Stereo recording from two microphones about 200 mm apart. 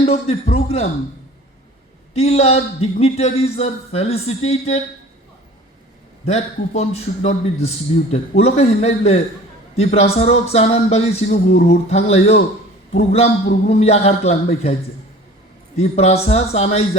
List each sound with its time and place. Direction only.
0.0 s a man's voice: 30° left (ahead or behind)
2.1 s a man's voice: 30° left (ahead or behind)
6.2 s a man's voice: 30° left (ahead or behind)
15.8 s a man's voice: 30° left (ahead or behind)